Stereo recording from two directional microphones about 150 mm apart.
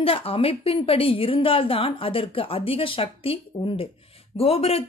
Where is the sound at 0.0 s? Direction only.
40° left (ahead or behind).